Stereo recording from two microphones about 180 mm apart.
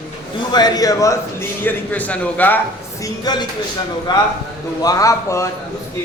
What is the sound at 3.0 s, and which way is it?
Speech, 25° left (ahead or behind).